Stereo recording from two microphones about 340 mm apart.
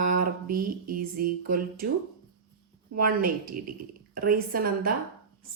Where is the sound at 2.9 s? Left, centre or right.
Right.